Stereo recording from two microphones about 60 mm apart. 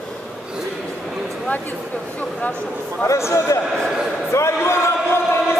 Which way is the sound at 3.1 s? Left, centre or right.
Left.